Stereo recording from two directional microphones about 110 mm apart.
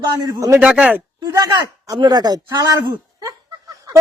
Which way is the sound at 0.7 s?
10° right (ahead or behind).